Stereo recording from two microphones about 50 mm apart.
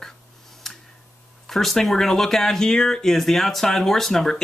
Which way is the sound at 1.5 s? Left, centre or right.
Centre.